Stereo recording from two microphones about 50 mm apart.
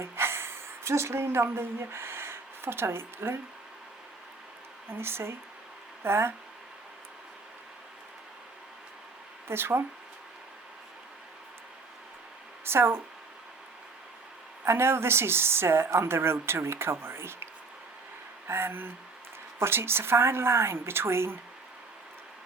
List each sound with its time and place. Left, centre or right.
0.0 s a sound: right
1.5 s speech: right
4.9 s a woman's voice: right
9.5 s a woman's voice: right
12.6 s a woman's voice: right
14.6 s a woman's voice: right